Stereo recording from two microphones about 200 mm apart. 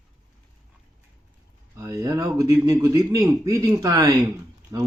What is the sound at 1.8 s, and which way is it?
A man's voice, 15° right (ahead or behind).